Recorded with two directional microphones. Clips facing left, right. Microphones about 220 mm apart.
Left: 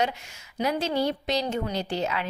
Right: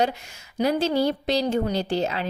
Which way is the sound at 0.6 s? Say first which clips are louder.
Right 4 dB; 35° right (ahead or behind).